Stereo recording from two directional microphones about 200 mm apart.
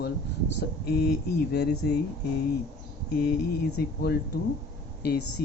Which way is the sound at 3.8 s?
50° left (ahead or behind).